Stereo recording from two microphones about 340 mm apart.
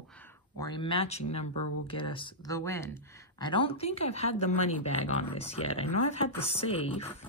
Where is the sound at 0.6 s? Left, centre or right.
Centre.